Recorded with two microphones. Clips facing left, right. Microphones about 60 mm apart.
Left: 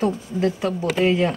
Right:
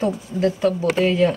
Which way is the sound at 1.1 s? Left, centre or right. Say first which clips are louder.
Right 2 dB; centre.